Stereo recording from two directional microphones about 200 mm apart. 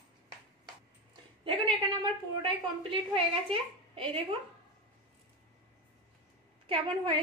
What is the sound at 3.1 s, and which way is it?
A woman's voice, 25° right (ahead or behind).